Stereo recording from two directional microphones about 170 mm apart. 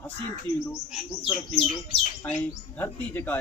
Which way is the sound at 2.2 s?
10° left (ahead or behind).